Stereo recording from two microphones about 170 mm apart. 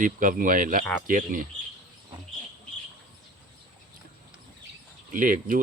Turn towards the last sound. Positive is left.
turn(degrees=-50)  # may be behind; listen again after turning